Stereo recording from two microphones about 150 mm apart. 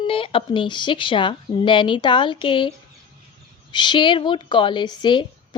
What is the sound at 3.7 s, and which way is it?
A woman's voice, 30° left (ahead or behind).